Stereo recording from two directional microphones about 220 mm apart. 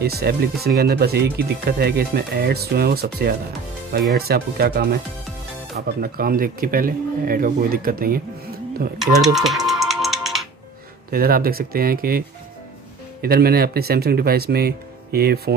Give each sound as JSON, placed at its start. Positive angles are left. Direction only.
{"t": 0.0, "sound": "speech", "side_deg": -45}
{"t": 8.9, "sound": "speech", "side_deg": 0}
{"t": 9.7, "sound": "music", "side_deg": 0}
{"t": 11.1, "sound": "speech", "side_deg": -40}